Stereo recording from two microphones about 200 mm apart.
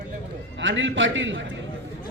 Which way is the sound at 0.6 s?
65° right (ahead or behind).